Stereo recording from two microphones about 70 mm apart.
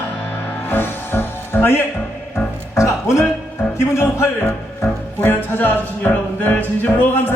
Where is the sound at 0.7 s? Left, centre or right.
Left.